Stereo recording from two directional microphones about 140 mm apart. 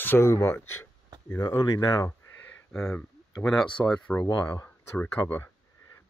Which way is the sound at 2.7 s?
5° left (ahead or behind).